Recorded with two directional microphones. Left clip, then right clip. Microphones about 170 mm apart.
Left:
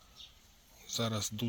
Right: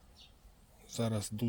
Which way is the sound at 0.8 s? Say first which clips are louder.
Left 2 dB; 20° right (ahead or behind).